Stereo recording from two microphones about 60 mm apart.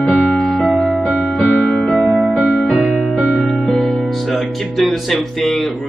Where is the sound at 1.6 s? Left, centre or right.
Centre.